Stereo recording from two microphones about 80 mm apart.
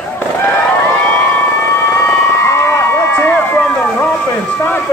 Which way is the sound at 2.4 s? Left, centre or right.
Left.